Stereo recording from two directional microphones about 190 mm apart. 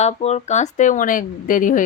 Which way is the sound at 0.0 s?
35° left (ahead or behind).